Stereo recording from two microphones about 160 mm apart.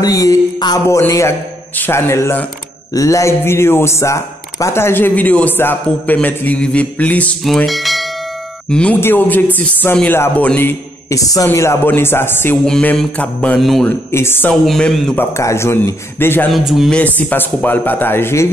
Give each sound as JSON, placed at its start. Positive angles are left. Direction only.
{"t": 0.0, "sound": "a sound", "side_deg": 20}
{"t": 1.8, "sound": "speech", "side_deg": 15}
{"t": 12.6, "sound": "speech", "side_deg": 5}
{"t": 14.1, "sound": "speech", "side_deg": 15}
{"t": 14.5, "sound": "speech", "side_deg": 5}
{"t": 15.3, "sound": "speech", "side_deg": 15}
{"t": 16.5, "sound": "speech", "side_deg": 0}
{"t": 17.0, "sound": "speech", "side_deg": 10}